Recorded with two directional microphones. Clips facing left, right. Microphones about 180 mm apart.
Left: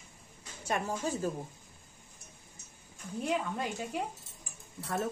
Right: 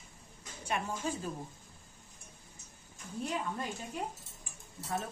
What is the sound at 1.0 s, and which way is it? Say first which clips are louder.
Speech: left 2 dB; 40° left (ahead or behind).